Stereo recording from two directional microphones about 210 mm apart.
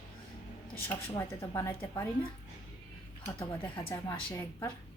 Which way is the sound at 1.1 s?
15° left (ahead or behind).